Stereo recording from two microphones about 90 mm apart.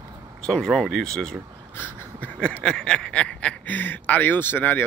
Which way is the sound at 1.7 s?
15° left (ahead or behind).